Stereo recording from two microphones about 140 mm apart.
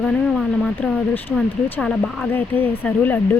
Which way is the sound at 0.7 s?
15° left (ahead or behind).